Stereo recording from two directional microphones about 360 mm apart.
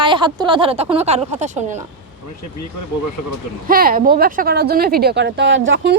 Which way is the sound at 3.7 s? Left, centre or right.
Right.